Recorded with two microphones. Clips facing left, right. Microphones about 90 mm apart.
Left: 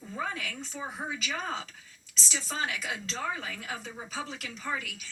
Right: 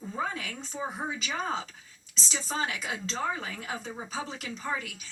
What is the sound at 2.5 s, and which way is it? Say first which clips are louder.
A woman's voice: right 2 dB; 30° right (ahead or behind).